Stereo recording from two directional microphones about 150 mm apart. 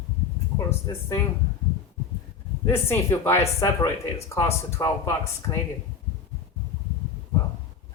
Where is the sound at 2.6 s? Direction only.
15° left (ahead or behind).